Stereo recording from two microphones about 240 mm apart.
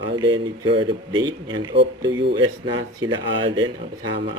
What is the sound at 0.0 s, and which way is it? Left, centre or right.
Speech, centre.